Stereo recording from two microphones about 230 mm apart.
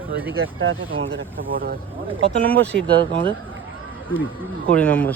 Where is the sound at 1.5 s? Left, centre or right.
Right.